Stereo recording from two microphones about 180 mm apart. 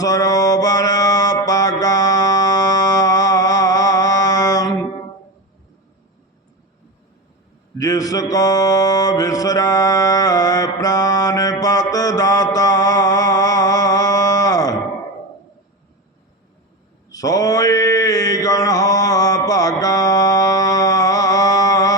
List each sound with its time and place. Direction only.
0.0 s mantra: 20° left (ahead or behind)
7.8 s mantra: 20° left (ahead or behind)
12.5 s a sound: 20° left (ahead or behind)
17.1 s mantra: 20° left (ahead or behind)